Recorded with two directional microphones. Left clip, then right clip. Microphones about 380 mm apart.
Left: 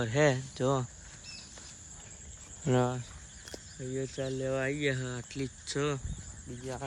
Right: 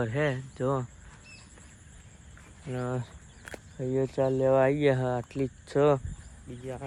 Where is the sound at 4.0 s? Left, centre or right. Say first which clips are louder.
Right 9 dB; centre.